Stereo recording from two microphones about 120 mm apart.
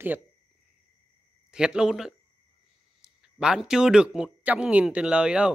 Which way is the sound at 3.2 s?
5° right (ahead or behind).